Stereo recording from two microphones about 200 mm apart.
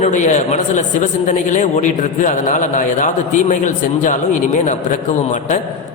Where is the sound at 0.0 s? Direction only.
35° left (ahead or behind).